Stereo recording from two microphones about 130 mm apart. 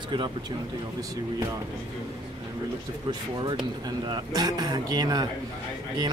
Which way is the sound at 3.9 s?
30° right (ahead or behind).